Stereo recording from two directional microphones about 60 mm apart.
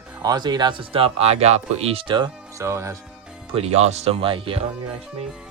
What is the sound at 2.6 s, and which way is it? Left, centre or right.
Speech, right.